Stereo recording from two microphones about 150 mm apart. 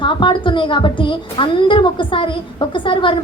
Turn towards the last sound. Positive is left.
turn(degrees=35)  # may be behind; listen again after turning